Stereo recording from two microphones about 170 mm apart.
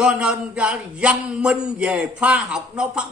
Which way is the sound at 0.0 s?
5° right (ahead or behind).